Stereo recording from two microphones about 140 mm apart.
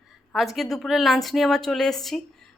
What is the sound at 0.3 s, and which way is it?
Speech, centre (ahead or behind).